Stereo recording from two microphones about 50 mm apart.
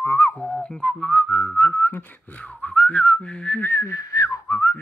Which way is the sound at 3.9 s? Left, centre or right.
Left.